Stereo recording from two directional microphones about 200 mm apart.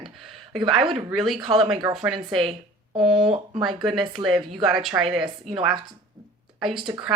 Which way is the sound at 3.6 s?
Centre (ahead or behind).